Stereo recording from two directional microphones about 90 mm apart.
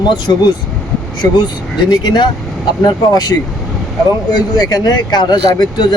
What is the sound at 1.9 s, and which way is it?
Speech, 55° left (ahead or behind).